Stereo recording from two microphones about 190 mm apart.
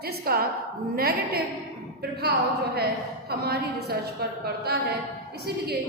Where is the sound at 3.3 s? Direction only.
55° right (ahead or behind).